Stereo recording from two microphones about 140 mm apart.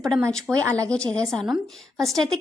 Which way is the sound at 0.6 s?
20° right (ahead or behind).